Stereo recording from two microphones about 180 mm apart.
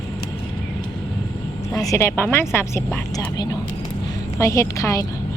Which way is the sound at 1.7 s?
15° left (ahead or behind).